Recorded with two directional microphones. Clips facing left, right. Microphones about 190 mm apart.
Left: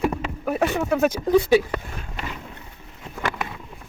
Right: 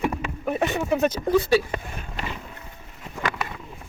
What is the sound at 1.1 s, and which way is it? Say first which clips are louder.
Speech: left 3 dB; 15° left (ahead or behind).